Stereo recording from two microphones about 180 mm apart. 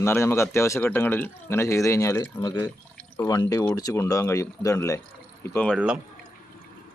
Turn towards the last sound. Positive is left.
turn(degrees=-10)  # may be behind; listen again after turning